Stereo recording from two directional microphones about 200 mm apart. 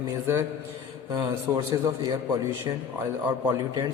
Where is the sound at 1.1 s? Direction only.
20° right (ahead or behind).